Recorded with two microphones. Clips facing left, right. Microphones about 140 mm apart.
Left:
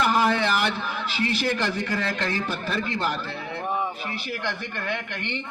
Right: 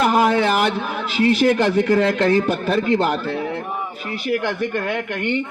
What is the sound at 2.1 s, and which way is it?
A man's voice, 40° right (ahead or behind).